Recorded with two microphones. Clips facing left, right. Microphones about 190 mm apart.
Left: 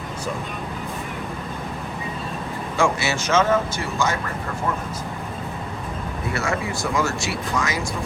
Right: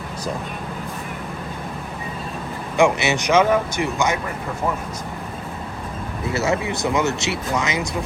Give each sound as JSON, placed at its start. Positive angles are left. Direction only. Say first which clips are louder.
{"t": 2.7, "sound": "speech", "louder": "right 4 dB", "side_deg": -20}
{"t": 6.3, "sound": "speech", "louder": "right 4 dB", "side_deg": -20}